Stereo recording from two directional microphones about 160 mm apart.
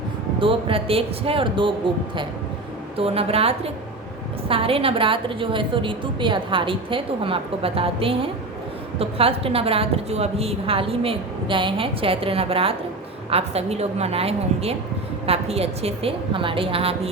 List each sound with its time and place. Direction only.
0.3 s a woman's voice: 35° right (ahead or behind)
3.0 s a woman's voice: 40° right (ahead or behind)